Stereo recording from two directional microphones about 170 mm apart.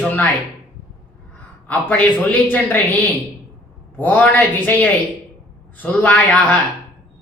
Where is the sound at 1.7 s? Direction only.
10° left (ahead or behind).